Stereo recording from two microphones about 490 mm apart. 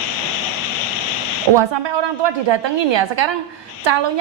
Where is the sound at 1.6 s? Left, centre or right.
Right.